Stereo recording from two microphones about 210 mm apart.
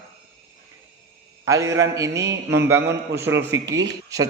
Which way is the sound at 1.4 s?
15° right (ahead or behind).